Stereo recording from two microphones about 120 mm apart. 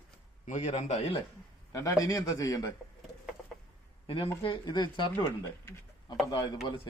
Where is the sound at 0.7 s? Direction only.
55° left (ahead or behind).